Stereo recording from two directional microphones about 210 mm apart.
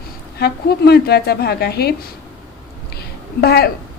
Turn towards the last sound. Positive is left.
turn(degrees=50)  # may be behind; listen again after turning